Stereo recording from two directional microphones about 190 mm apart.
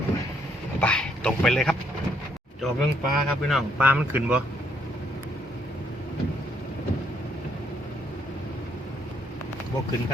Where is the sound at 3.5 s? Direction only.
10° right (ahead or behind).